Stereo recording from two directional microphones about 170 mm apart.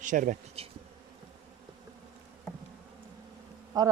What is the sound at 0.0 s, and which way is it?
Insect, 50° right (ahead or behind).